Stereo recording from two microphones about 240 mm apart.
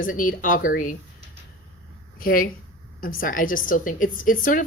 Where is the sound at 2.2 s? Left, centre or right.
Left.